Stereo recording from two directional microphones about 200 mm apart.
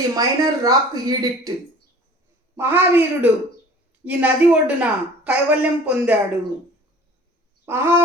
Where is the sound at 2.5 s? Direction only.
10° right (ahead or behind).